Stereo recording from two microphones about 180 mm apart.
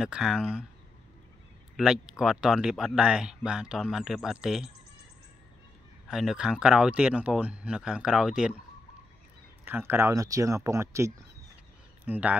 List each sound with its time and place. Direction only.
0.0 s speech: centre (ahead or behind)
1.8 s speech: centre (ahead or behind)
6.0 s speech: centre (ahead or behind)
9.7 s speech: 10° right (ahead or behind)